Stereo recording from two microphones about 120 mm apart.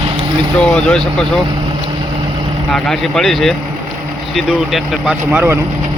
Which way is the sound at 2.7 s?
5° left (ahead or behind).